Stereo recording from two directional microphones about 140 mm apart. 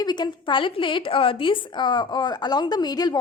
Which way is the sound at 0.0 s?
30° left (ahead or behind).